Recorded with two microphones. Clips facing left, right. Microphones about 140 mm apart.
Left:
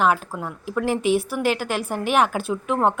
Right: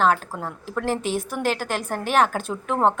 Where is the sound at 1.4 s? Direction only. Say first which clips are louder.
Left 2 dB; 40° right (ahead or behind).